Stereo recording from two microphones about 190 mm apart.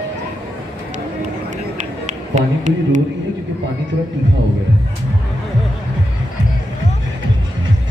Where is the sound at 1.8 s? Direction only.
40° right (ahead or behind).